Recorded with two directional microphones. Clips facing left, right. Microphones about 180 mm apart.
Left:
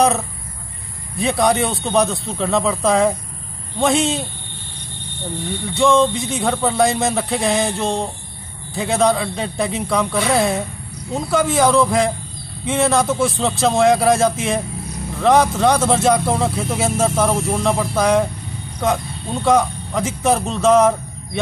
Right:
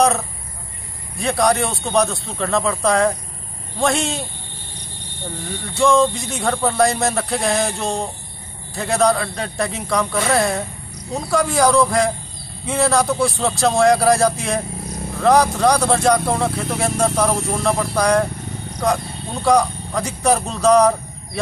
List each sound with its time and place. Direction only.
1.2 s speech: centre (ahead or behind)
5.8 s speech: centre (ahead or behind)
19.4 s speech: centre (ahead or behind)